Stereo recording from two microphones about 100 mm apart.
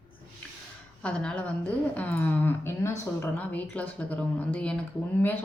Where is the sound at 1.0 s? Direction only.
10° left (ahead or behind); by 3.3 s 25° left (ahead or behind).